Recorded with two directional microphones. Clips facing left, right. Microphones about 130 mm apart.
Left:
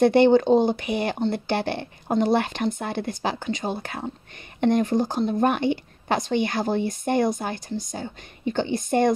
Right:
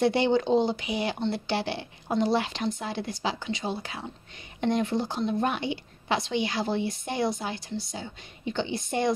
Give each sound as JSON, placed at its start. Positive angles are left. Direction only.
{"t": 0.0, "sound": "a woman's voice", "side_deg": 55}